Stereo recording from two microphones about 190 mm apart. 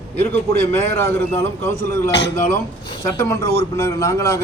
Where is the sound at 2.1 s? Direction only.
65° left (ahead or behind).